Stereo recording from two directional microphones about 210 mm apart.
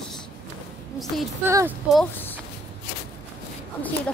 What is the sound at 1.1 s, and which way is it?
Speech, centre (ahead or behind).